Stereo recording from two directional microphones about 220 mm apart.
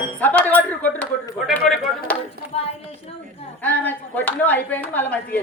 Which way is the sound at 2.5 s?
30° left (ahead or behind).